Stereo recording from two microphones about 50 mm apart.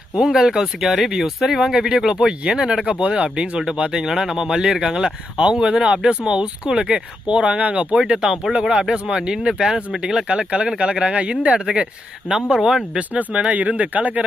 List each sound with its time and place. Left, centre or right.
0.2 s speech: centre
12.5 s speech: centre
13.0 s speech: right